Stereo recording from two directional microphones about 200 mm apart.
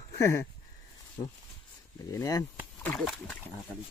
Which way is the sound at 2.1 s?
15° left (ahead or behind).